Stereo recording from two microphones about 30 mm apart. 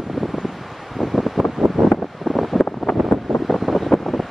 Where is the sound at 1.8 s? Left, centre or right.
Right.